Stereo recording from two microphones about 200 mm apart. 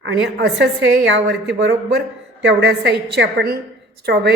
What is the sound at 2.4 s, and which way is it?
A woman's voice, 55° right (ahead or behind).